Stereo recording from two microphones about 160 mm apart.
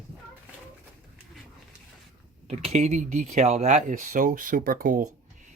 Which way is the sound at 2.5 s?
45° right (ahead or behind).